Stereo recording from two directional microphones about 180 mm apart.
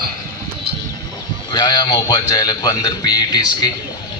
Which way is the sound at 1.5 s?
25° left (ahead or behind).